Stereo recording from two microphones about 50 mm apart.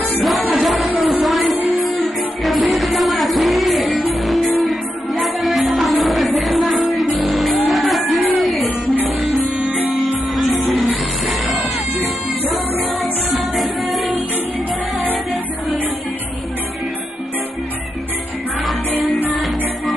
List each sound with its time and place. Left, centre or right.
0.2 s music: centre
9.6 s music: right
9.9 s music: centre
13.3 s music: centre